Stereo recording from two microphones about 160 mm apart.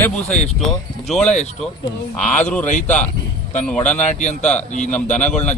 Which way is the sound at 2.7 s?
50° left (ahead or behind).